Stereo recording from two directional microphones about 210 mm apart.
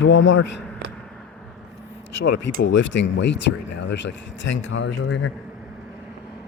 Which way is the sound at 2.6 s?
60° left (ahead or behind).